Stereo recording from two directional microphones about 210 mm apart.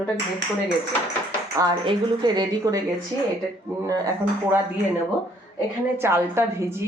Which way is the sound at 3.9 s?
15° right (ahead or behind).